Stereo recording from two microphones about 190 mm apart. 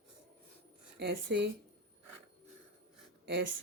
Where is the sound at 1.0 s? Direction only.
60° right (ahead or behind).